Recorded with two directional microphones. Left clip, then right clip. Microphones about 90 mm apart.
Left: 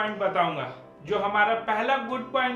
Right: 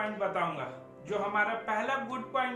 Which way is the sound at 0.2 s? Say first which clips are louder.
Left 8 dB; 20° left (ahead or behind).